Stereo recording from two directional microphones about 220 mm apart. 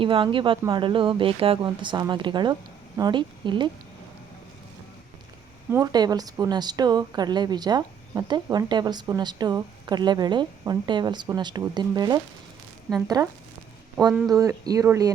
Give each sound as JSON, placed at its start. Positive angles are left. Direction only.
{"t": 0.0, "sound": "a woman's voice", "side_deg": -25}
{"t": 5.7, "sound": "a woman's voice", "side_deg": -20}
{"t": 14.3, "sound": "speech", "side_deg": -15}